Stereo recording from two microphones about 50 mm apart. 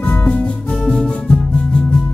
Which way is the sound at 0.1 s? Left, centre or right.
Left.